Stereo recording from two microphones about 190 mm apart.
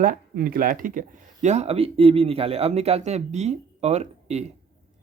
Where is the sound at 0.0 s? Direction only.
50° right (ahead or behind).